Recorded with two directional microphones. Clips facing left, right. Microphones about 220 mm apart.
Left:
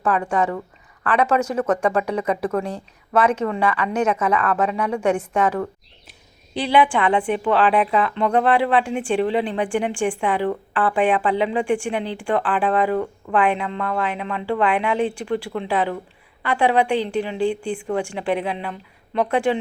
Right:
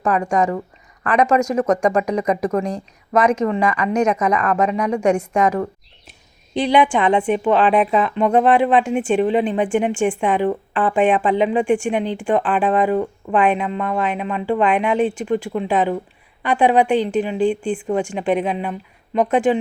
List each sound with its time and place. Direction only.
0.0 s a woman's voice: 10° right (ahead or behind)